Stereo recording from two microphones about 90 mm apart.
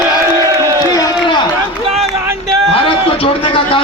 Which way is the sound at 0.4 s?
35° right (ahead or behind).